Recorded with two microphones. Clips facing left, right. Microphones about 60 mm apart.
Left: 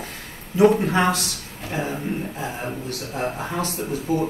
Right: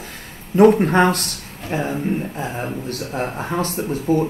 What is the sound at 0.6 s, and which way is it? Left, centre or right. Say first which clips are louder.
Speech: right 4 dB; right.